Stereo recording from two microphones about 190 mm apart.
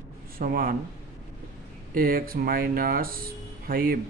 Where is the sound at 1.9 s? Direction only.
50° right (ahead or behind).